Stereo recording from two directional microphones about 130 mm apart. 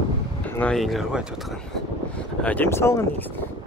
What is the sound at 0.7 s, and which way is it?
Speech, centre (ahead or behind).